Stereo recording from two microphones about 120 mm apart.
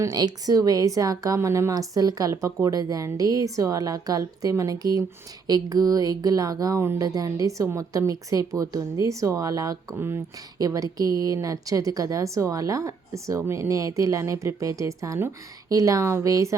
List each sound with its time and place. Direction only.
0.0 s a woman's voice: 35° right (ahead or behind)